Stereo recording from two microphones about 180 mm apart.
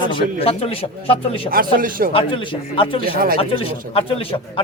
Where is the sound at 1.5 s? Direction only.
55° right (ahead or behind).